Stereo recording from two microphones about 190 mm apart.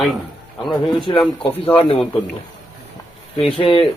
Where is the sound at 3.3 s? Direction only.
30° left (ahead or behind).